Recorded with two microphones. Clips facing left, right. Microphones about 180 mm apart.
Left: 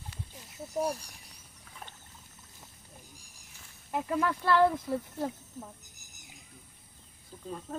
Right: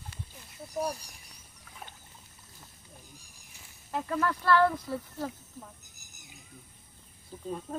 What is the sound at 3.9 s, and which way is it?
Speech, 15° left (ahead or behind).